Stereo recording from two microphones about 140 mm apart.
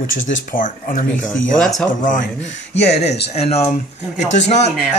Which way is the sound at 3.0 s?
50° left (ahead or behind).